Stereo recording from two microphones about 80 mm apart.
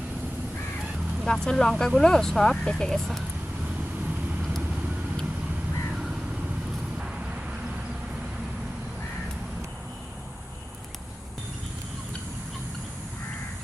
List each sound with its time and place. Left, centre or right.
1.2 s speech: centre